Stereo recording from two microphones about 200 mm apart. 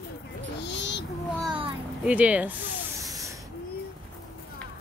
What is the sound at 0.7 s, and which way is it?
Child singing, 60° left (ahead or behind).